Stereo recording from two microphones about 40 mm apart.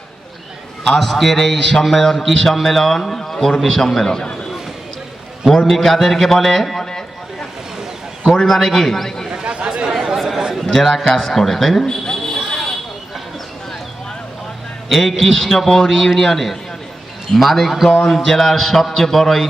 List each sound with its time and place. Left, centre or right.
0.9 s a man's voice: centre
5.5 s a man's voice: centre
8.3 s a man's voice: centre
9.3 s chatter: right
10.2 s a sound: centre
10.7 s a man's voice: centre
11.9 s a sound: centre
14.8 s a man's voice: centre